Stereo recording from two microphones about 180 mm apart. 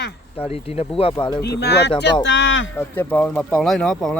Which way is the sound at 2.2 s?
90° left.